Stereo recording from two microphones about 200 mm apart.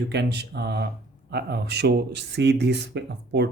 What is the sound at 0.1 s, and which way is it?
Speech, 55° right (ahead or behind).